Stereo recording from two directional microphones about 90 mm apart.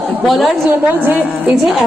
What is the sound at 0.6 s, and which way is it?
Speech, 20° right (ahead or behind).